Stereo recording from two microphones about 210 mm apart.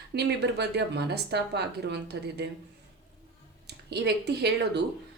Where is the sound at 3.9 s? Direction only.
50° right (ahead or behind).